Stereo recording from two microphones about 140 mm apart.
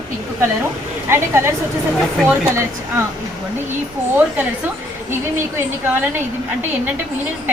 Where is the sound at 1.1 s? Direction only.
20° right (ahead or behind).